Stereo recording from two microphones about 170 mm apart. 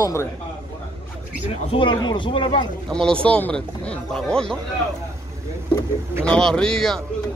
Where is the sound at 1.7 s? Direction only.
30° left (ahead or behind).